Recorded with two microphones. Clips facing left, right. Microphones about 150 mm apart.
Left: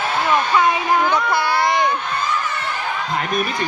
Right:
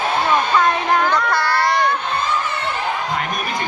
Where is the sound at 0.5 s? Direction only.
10° left (ahead or behind).